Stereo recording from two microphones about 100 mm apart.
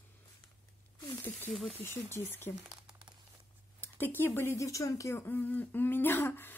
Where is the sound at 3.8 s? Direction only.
20° left (ahead or behind).